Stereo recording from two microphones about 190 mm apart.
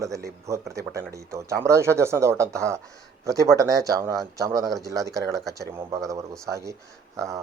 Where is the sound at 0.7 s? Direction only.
15° right (ahead or behind).